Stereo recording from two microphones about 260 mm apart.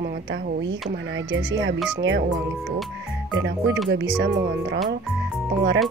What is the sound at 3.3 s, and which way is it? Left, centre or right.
A woman's voice, right.